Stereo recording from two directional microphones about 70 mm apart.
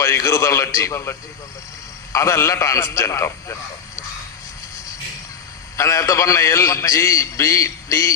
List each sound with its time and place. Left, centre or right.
0.0 s a man's voice: left
2.1 s a man's voice: left
5.7 s a man's voice: left